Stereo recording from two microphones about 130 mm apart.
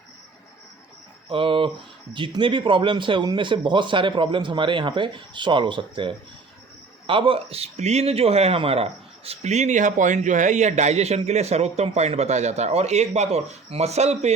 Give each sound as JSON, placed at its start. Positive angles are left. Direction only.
{"t": 1.3, "sound": "speech", "side_deg": -45}